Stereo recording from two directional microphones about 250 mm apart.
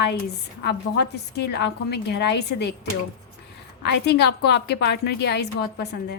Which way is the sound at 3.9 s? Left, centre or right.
Left.